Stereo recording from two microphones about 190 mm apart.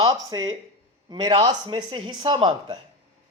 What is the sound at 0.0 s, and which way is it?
A man's voice, 20° right (ahead or behind).